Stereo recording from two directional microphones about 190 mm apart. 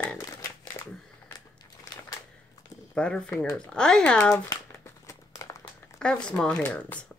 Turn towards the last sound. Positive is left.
turn(degrees=5)  # may be behind; listen again after turning